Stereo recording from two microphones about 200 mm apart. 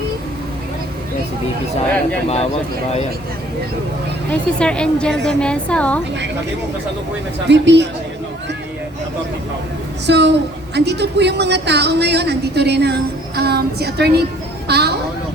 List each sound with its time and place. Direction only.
4.3 s a woman's voice: 5° left (ahead or behind)
7.4 s a woman's voice: 60° right (ahead or behind)
10.1 s a woman's voice: 60° right (ahead or behind)